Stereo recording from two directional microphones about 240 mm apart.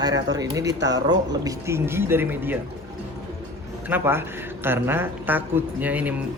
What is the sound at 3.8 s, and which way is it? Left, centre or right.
Speech, centre.